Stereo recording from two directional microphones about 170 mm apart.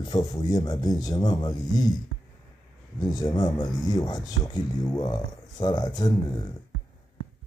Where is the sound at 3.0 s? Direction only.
20° left (ahead or behind).